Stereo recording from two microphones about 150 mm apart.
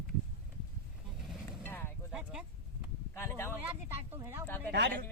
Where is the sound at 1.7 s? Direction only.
15° left (ahead or behind).